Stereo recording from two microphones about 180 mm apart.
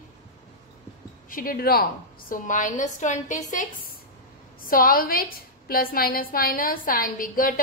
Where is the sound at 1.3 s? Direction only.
50° left (ahead or behind).